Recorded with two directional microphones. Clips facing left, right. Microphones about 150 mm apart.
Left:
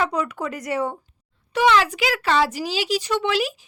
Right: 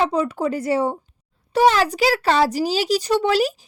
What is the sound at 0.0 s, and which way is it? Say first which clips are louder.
Speech: right 4 dB; 30° right (ahead or behind).